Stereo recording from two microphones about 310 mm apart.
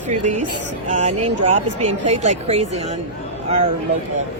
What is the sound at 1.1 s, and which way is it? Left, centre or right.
Speech, right.